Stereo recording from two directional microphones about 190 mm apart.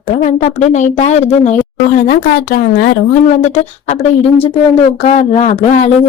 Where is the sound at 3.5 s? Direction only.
35° left (ahead or behind).